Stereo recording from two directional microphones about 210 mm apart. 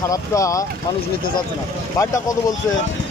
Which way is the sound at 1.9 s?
15° left (ahead or behind).